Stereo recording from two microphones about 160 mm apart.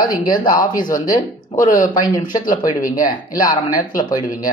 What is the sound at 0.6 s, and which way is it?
Speech, 55° left (ahead or behind).